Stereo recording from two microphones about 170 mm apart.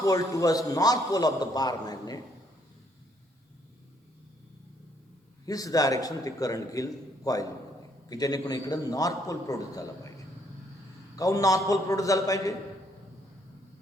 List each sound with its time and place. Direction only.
0.0 s a man's voice: 20° left (ahead or behind)
5.5 s a man's voice: 20° left (ahead or behind)
11.2 s a man's voice: 20° left (ahead or behind)